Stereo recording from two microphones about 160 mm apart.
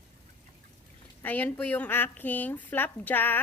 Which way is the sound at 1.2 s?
10° left (ahead or behind).